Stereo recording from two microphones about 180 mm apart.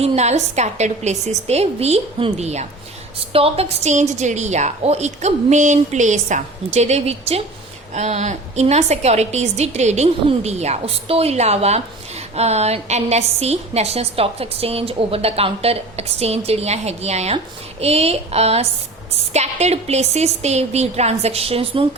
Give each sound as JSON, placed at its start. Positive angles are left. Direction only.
{"t": 0.0, "sound": "a woman's voice", "side_deg": -35}